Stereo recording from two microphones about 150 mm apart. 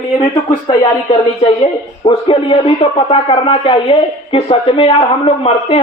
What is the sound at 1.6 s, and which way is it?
Speech, 35° left (ahead or behind).